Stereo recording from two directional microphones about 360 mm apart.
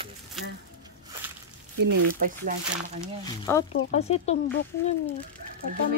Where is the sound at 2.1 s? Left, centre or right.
Right.